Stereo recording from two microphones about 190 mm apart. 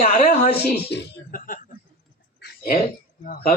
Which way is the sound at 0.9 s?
65° left (ahead or behind).